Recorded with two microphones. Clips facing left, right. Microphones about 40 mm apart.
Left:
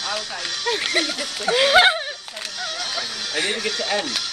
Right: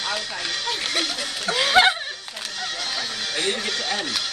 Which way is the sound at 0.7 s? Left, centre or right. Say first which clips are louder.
Left 6 dB; centre.